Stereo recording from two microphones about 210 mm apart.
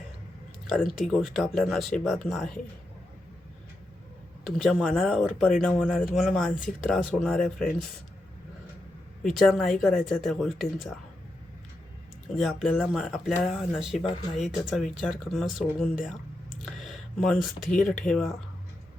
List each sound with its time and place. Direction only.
0.7 s speech: centre (ahead or behind)
4.4 s speech: centre (ahead or behind)
9.4 s speech: centre (ahead or behind)
12.3 s speech: centre (ahead or behind)
14.1 s speech: 35° left (ahead or behind)
14.5 s speech: 5° left (ahead or behind)
16.7 s a sound: centre (ahead or behind)
17.7 s speech: 5° left (ahead or behind)